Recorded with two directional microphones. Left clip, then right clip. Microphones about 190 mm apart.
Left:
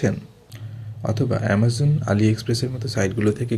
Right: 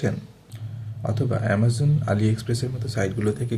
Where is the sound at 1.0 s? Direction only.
30° left (ahead or behind).